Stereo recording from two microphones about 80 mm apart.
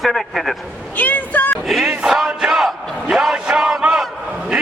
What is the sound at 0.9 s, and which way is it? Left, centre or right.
Speech, left.